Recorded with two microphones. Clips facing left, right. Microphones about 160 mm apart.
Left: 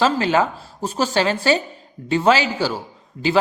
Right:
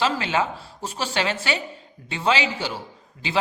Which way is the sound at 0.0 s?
40° left (ahead or behind).